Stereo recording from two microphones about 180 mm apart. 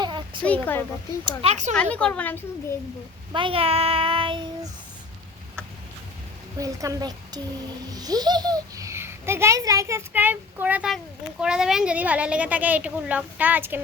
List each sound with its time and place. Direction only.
0.0 s a sound: 25° right (ahead or behind)
0.4 s speech: 10° left (ahead or behind)
1.4 s child singing: 40° right (ahead or behind)
1.7 s speech: 5° left (ahead or behind)
3.3 s child singing: 30° right (ahead or behind)
6.6 s a child's voice: 20° right (ahead or behind)